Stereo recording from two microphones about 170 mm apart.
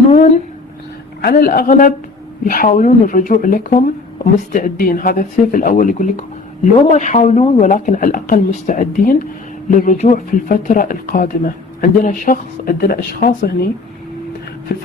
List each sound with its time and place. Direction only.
1.2 s a man's voice: 60° left (ahead or behind); by 7.7 s 40° left (ahead or behind)
7.7 s speech: 50° left (ahead or behind)